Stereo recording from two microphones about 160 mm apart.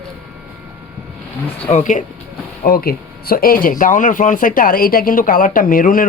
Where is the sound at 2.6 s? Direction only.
70° left (ahead or behind).